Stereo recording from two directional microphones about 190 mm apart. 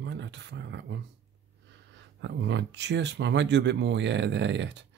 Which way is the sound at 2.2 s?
70° right (ahead or behind).